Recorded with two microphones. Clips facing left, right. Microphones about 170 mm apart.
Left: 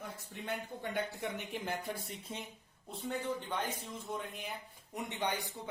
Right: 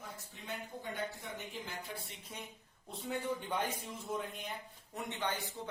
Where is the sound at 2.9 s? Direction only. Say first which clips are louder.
Left 1 dB; centre (ahead or behind).